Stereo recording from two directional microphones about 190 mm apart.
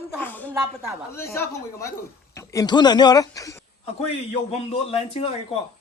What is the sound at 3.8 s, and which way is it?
A man's voice, 30° left (ahead or behind).